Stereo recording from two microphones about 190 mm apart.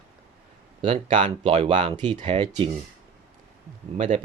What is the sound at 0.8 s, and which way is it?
Speech, 30° right (ahead or behind).